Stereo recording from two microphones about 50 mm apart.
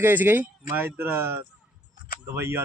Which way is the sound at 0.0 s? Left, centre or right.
Right.